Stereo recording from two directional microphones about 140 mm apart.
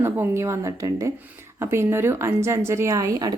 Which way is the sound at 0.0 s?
20° right (ahead or behind).